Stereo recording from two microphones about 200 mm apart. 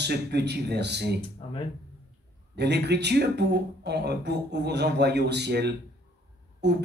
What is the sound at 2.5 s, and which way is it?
Speech, 55° right (ahead or behind).